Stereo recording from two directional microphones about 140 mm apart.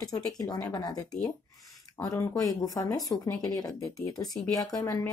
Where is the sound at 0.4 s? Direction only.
25° left (ahead or behind).